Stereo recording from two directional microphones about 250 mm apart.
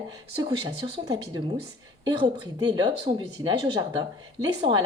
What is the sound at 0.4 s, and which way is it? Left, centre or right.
Speech, centre.